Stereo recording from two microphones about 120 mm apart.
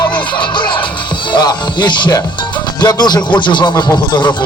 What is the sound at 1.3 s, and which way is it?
Speech, 35° left (ahead or behind).